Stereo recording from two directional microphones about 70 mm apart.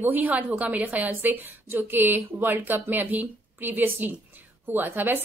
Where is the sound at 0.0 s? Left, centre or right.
Right.